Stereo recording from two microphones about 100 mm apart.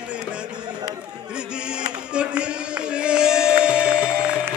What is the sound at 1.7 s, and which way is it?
Music, 10° right (ahead or behind).